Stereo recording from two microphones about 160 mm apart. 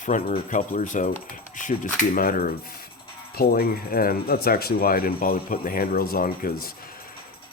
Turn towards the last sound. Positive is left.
turn(degrees=65)  # may be behind; listen again after turning